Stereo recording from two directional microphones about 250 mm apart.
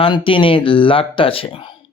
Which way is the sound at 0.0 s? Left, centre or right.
Left.